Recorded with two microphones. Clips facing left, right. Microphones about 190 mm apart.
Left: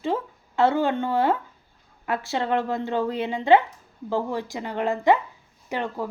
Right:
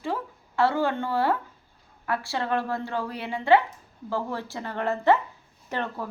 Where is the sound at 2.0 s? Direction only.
20° left (ahead or behind).